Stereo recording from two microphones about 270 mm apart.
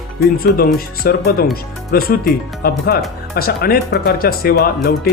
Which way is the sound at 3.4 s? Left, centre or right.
Left.